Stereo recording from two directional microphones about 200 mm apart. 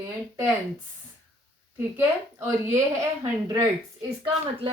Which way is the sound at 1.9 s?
10° right (ahead or behind).